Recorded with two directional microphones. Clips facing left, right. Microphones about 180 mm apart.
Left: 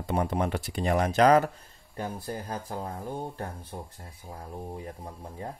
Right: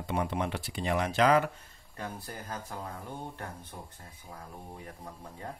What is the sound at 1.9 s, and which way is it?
Speech, 30° left (ahead or behind).